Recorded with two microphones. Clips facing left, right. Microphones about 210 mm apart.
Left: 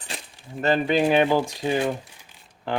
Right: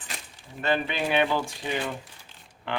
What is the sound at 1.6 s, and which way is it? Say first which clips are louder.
Speech: left 7 dB; 40° left (ahead or behind).